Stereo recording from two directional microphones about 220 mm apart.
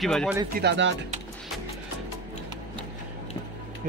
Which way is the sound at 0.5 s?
50° right (ahead or behind).